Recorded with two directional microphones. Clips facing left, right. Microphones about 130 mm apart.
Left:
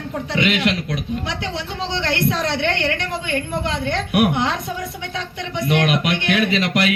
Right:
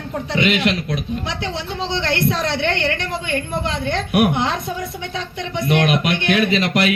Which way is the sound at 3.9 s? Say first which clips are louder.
Right 1 dB; 30° right (ahead or behind).